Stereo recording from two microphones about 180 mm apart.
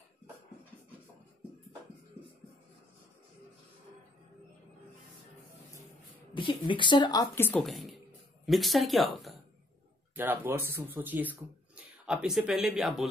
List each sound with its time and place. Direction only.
6.3 s a woman's voice: 25° left (ahead or behind); by 7.6 s 10° left (ahead or behind)
7.6 s speech: centre (ahead or behind)
10.1 s speech: 10° right (ahead or behind)